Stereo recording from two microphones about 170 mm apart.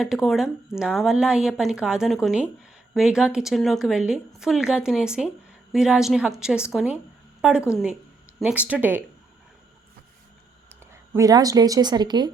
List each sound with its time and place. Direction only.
0.0 s a woman's voice: 5° right (ahead or behind)
11.1 s speech: 20° right (ahead or behind)